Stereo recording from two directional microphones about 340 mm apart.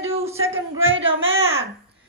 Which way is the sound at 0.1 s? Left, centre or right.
Centre.